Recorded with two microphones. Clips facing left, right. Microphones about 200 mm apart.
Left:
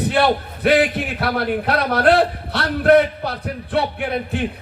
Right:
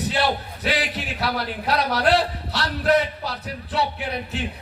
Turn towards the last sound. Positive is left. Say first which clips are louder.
# left 6 dB
turn(degrees=55)  # may be behind; listen again after turning